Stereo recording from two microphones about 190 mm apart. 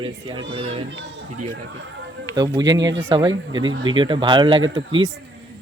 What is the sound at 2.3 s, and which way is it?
Speech, 20° right (ahead or behind).